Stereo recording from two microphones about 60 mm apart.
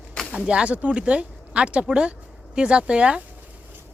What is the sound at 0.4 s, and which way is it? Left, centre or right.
Speech, centre.